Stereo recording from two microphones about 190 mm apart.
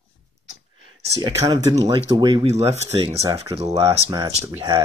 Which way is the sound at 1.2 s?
20° right (ahead or behind).